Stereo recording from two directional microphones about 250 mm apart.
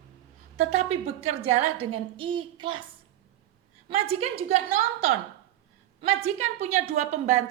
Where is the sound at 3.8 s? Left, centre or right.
Right.